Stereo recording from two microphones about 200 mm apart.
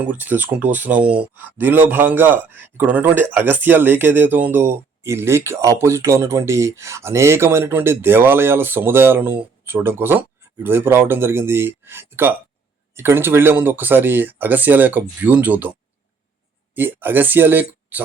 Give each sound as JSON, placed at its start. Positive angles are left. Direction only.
{"t": 0.0, "sound": "speech", "side_deg": -10}
{"t": 16.7, "sound": "speech", "side_deg": -10}